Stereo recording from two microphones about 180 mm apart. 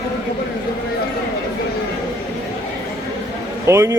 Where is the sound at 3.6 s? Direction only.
15° right (ahead or behind).